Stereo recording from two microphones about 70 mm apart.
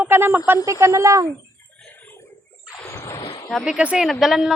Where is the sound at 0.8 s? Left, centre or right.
Right.